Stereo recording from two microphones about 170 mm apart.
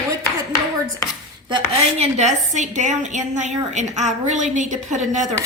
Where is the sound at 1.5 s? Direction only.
40° right (ahead or behind).